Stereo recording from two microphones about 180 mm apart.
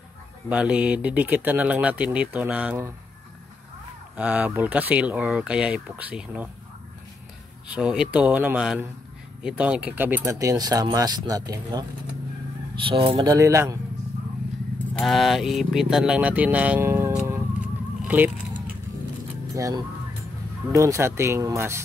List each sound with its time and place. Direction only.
0.5 s speech: 5° right (ahead or behind)
4.2 s speech: 5° right (ahead or behind)
7.6 s speech: 5° right (ahead or behind); by 11.8 s 20° right (ahead or behind)
12.8 s speech: 30° right (ahead or behind)
15.0 s speech: centre (ahead or behind)
19.5 s speech: 20° right (ahead or behind)